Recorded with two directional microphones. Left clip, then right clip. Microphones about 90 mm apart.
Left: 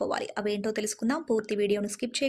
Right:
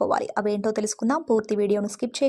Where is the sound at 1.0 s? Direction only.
25° right (ahead or behind).